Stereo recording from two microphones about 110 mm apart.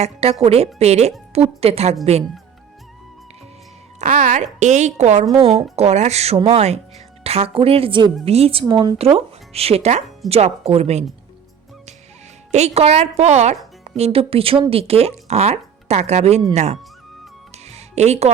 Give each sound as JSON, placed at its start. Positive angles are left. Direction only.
{"t": 0.0, "sound": "a woman's voice", "side_deg": -65}
{"t": 0.8, "sound": "speech", "side_deg": -75}
{"t": 1.3, "sound": "speech", "side_deg": -65}
{"t": 4.0, "sound": "a woman's voice", "side_deg": -90}
{"t": 7.3, "sound": "a woman's voice", "side_deg": -65}
{"t": 8.2, "sound": "a woman's voice", "side_deg": -65}
{"t": 8.6, "sound": "speech", "side_deg": -40}
{"t": 9.0, "sound": "speech", "side_deg": -70}
{"t": 12.5, "sound": "a woman's voice", "side_deg": -90}
{"t": 13.8, "sound": "a woman's voice", "side_deg": -70}
{"t": 17.7, "sound": "music", "side_deg": -85}